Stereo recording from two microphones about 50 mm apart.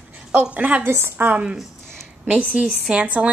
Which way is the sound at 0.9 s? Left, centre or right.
Right.